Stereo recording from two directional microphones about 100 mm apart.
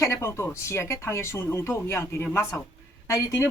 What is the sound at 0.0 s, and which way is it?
A woman's voice, 25° left (ahead or behind).